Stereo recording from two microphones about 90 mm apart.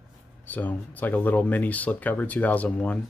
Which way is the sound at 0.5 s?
20° left (ahead or behind).